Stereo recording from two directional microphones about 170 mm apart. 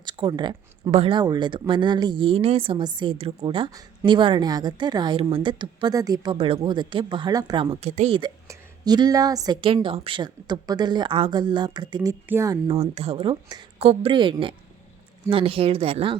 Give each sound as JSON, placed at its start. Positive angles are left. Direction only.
{"t": 0.0, "sound": "speech", "side_deg": -25}
{"t": 6.3, "sound": "speech", "side_deg": -35}
{"t": 8.4, "sound": "speech", "side_deg": -25}
{"t": 12.6, "sound": "speech", "side_deg": -35}